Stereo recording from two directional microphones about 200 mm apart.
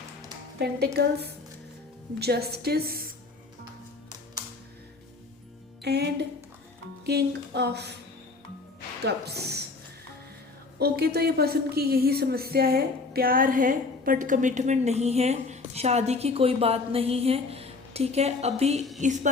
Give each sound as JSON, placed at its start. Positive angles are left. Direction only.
{"t": 0.6, "sound": "speech", "side_deg": -55}
{"t": 2.1, "sound": "a woman's voice", "side_deg": -55}
{"t": 5.8, "sound": "speech", "side_deg": -55}
{"t": 9.0, "sound": "speech", "side_deg": -55}
{"t": 10.8, "sound": "a woman's voice", "side_deg": -50}